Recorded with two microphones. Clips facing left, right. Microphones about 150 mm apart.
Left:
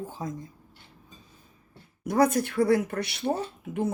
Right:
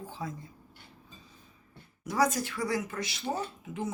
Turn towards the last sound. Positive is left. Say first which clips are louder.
# left 6 dB
turn(degrees=60)  # may be behind; listen again after turning